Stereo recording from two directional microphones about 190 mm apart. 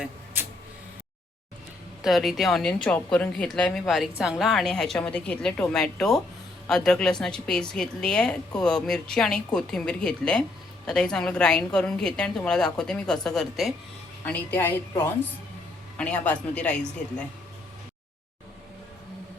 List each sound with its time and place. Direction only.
2.0 s a woman's voice: centre (ahead or behind)